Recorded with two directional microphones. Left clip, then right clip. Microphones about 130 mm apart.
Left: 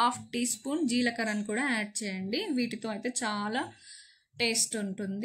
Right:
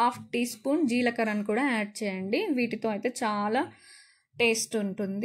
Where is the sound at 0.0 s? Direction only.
25° right (ahead or behind).